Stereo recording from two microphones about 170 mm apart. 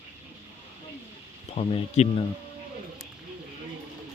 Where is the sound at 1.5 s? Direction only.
40° left (ahead or behind).